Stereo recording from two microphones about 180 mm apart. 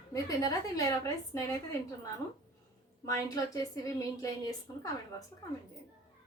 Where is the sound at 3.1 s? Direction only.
20° left (ahead or behind).